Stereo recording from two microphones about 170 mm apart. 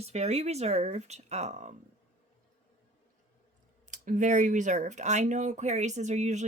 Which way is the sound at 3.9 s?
45° right (ahead or behind).